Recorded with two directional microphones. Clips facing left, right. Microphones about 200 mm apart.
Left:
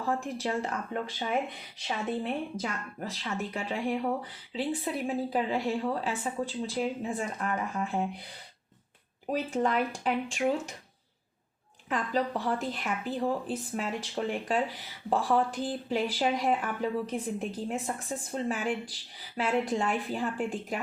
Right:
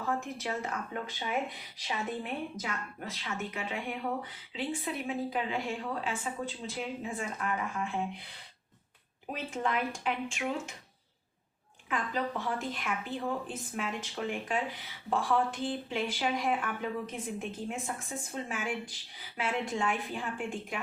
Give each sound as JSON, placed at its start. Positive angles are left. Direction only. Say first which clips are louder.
{"t": 0.2, "sound": "a woman's voice", "louder": "left 4 dB", "side_deg": 30}
{"t": 2.2, "sound": "a woman's voice", "louder": "left 4 dB", "side_deg": 35}
{"t": 9.3, "sound": "a woman's voice", "louder": "left 5 dB", "side_deg": 35}
{"t": 11.9, "sound": "a woman's voice", "louder": "left 4 dB", "side_deg": 35}